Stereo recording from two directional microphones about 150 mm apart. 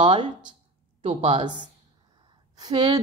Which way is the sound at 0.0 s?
30° right (ahead or behind).